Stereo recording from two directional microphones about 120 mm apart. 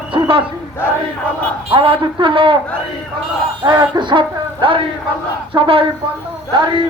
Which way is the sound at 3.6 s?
35° right (ahead or behind).